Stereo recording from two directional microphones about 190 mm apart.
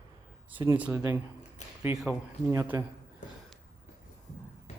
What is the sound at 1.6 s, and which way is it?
Speech, 40° left (ahead or behind).